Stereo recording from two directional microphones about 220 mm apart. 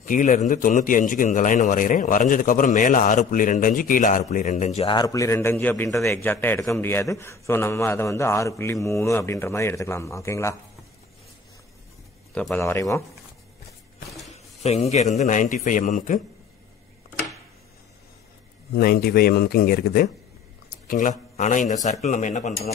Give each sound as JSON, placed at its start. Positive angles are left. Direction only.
{"t": 0.0, "sound": "a man's voice", "side_deg": 35}
{"t": 12.4, "sound": "a man's voice", "side_deg": 5}
{"t": 14.6, "sound": "a man's voice", "side_deg": 30}
{"t": 18.8, "sound": "a man's voice", "side_deg": 45}